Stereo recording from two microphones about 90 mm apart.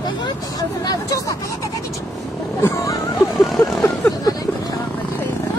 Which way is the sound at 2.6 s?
30° left (ahead or behind).